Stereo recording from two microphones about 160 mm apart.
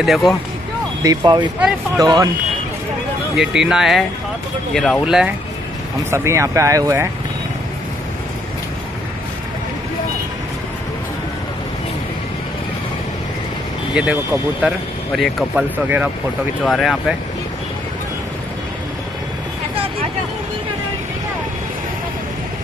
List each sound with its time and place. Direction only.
0.0 s speech: centre (ahead or behind)
1.0 s speech: 25° right (ahead or behind)
3.3 s speech: 5° right (ahead or behind)
6.0 s speech: 15° right (ahead or behind)
13.9 s speech: 10° right (ahead or behind)
16.6 s speech: centre (ahead or behind)